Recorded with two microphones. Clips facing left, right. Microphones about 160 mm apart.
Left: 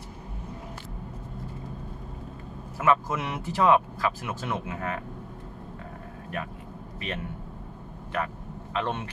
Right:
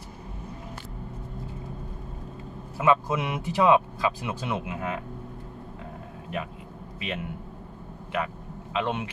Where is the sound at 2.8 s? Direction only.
15° right (ahead or behind).